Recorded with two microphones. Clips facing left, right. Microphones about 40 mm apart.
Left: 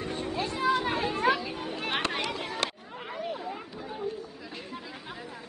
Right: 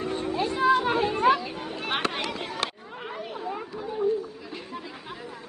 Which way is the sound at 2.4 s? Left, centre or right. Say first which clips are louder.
Right 1 dB; centre.